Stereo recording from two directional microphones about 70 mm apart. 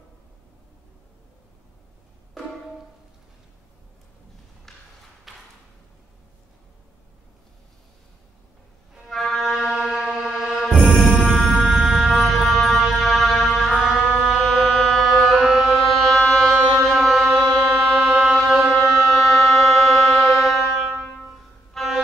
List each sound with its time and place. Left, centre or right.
5.3 s a sound: centre
9.1 s music: centre
11.6 s music: centre
12.0 s vehicle: centre
13.0 s music: centre
16.4 s music: centre
18.8 s music: centre